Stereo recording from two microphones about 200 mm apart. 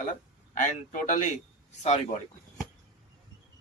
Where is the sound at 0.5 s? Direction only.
40° left (ahead or behind).